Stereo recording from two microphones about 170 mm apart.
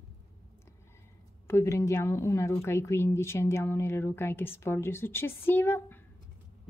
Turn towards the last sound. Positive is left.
turn(degrees=10)  # may be behind; listen again after turning